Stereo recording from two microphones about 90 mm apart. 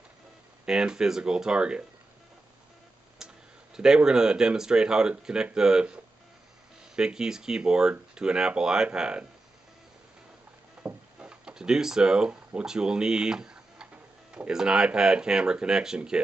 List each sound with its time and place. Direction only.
0.7 s speech: 10° right (ahead or behind)
3.2 s a sound: 5° right (ahead or behind)
3.7 s speech: 5° right (ahead or behind)
7.0 s speech: 5° right (ahead or behind)
10.8 s drawer open or close: 15° right (ahead or behind)
14.3 s speech: 10° right (ahead or behind)